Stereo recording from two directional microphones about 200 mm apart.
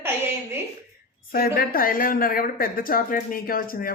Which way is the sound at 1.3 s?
50° left (ahead or behind).